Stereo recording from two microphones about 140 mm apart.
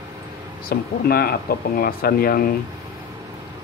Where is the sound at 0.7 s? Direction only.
90° left.